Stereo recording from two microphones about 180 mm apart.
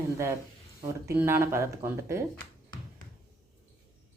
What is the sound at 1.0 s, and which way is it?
Speech, 15° right (ahead or behind).